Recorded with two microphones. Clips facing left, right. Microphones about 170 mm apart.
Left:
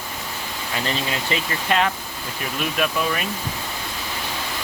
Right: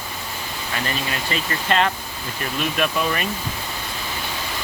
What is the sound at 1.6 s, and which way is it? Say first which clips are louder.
Speech: right 1 dB; 5° left (ahead or behind).